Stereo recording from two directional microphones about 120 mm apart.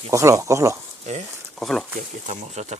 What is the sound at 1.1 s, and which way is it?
Speech, 75° right (ahead or behind).